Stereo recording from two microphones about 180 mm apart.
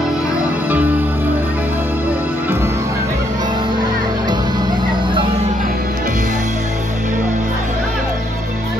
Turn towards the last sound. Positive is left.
turn(degrees=-45)  # may be behind; listen again after turning